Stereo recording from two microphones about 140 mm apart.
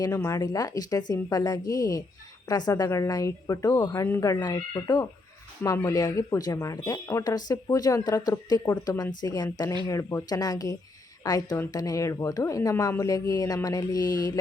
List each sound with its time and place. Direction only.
0.1 s a woman's voice: 20° left (ahead or behind)